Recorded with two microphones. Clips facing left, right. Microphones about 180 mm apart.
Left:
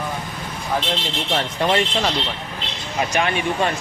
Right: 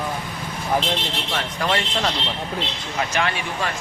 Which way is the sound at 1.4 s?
25° left (ahead or behind).